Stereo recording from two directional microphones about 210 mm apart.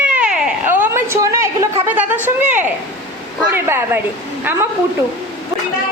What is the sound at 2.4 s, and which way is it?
Speech, 35° right (ahead or behind).